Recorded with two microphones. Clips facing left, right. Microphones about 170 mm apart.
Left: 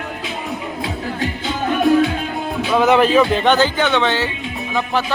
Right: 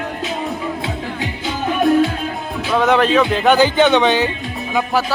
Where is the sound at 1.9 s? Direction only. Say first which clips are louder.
Even; centre (ahead or behind).